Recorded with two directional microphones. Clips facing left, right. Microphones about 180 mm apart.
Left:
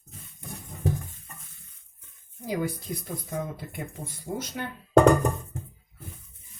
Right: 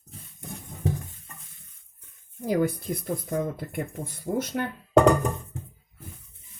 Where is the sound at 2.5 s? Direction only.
55° right (ahead or behind).